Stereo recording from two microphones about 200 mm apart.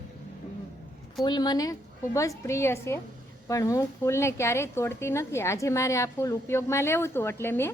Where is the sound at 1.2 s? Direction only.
20° left (ahead or behind).